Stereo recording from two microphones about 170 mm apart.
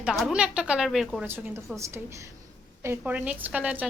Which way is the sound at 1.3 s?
15° right (ahead or behind).